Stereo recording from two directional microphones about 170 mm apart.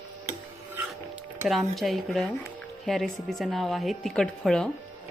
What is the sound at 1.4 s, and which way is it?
A woman's voice, centre (ahead or behind).